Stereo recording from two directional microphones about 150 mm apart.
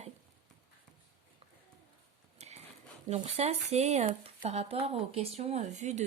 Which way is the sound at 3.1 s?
45° right (ahead or behind).